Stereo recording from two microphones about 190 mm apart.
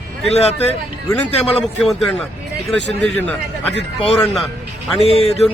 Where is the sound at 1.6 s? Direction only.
Centre (ahead or behind).